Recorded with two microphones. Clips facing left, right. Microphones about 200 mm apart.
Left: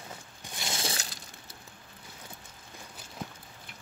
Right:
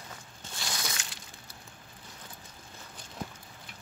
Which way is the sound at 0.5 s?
25° left (ahead or behind).